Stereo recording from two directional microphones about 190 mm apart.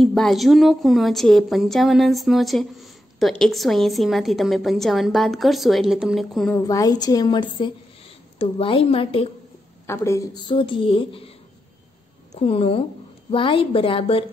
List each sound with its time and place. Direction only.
0.0 s a woman's voice: centre (ahead or behind)
6.5 s a woman's voice: 20° left (ahead or behind)
9.8 s a woman's voice: 15° left (ahead or behind)
12.4 s a woman's voice: 30° left (ahead or behind)